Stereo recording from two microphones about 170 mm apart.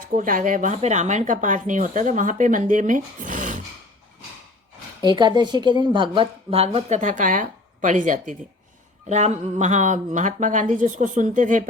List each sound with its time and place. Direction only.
0.2 s speech: 50° right (ahead or behind)
5.1 s a woman's voice: 25° right (ahead or behind); by 11.7 s 50° right (ahead or behind)